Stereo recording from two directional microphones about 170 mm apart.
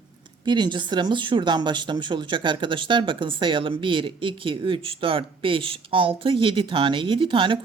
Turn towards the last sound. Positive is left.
turn(degrees=-30)  # may be behind; listen again after turning